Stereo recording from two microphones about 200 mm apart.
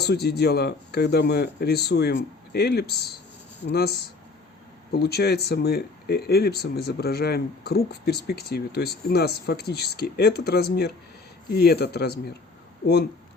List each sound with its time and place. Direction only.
0.0 s speech: 55° left (ahead or behind)